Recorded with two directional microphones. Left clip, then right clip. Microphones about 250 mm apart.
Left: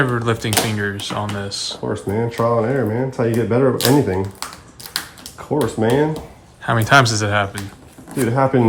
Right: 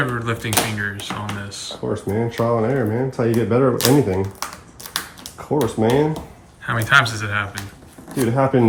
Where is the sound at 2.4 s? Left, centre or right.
Left.